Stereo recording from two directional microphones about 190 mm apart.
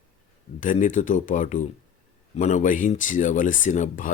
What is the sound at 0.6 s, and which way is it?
Speech, 40° left (ahead or behind).